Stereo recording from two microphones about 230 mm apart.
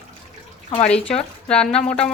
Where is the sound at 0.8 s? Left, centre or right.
Centre.